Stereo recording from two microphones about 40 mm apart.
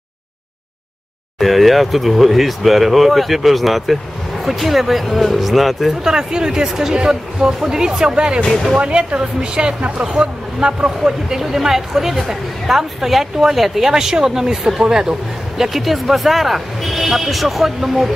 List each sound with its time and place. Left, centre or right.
1.4 s speech: centre
6.0 s speech: centre
8.5 s speech: centre
8.7 s speech: right; by 18.1 s centre